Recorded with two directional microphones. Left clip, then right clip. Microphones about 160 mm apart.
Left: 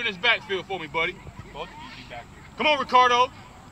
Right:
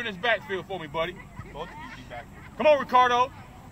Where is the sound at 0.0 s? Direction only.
30° right (ahead or behind).